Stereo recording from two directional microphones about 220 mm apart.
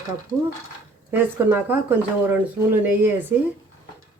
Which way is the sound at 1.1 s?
10° right (ahead or behind).